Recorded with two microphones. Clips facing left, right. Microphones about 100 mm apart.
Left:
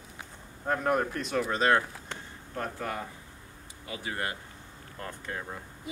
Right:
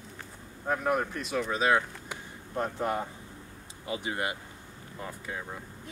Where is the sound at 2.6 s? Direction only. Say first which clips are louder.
Right 4 dB; 20° right (ahead or behind).